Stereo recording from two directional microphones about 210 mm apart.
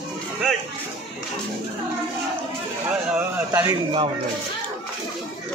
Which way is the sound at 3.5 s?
20° right (ahead or behind).